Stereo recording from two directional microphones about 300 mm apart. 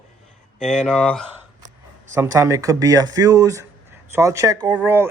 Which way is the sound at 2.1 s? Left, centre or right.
Centre.